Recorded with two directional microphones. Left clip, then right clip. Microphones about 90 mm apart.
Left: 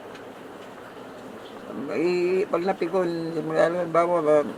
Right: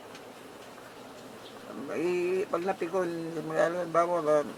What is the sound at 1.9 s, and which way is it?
Speech, 20° right (ahead or behind).